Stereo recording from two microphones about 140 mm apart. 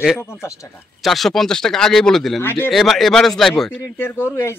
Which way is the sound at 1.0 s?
Centre (ahead or behind).